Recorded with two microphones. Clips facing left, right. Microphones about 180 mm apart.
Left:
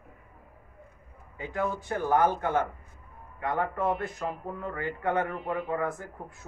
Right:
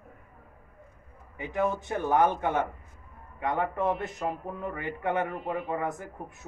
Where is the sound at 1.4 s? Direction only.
20° right (ahead or behind).